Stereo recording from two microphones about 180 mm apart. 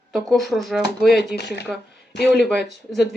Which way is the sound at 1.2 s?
70° left (ahead or behind).